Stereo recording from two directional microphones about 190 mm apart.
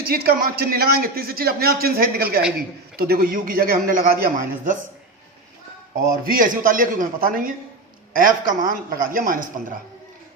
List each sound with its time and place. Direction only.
0.1 s a man's voice: 55° right (ahead or behind)
6.3 s a man's voice: 45° right (ahead or behind)